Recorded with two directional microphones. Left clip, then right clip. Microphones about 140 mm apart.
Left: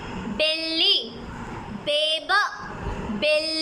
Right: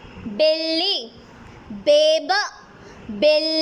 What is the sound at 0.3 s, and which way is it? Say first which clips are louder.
A woman's voice: right 5 dB; 45° right (ahead or behind).